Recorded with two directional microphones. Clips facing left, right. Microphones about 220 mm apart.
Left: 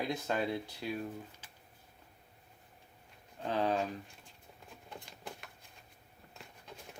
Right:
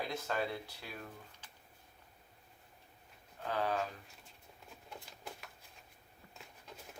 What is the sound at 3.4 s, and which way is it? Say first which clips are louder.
Speech: left 4 dB; 25° left (ahead or behind).